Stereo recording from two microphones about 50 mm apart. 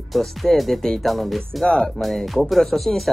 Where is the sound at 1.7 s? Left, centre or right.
Centre.